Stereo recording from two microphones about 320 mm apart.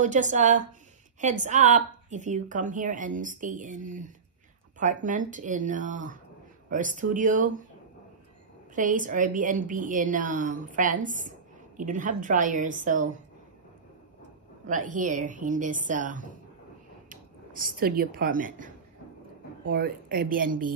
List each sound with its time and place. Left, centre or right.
0.0 s a woman's voice: right
8.7 s a woman's voice: right
14.7 s a woman's voice: right
19.7 s a woman's voice: right